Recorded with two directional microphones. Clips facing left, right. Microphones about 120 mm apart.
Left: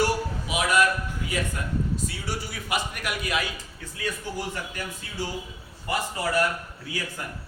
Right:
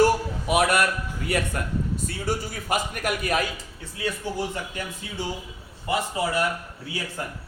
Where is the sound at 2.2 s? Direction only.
45° right (ahead or behind).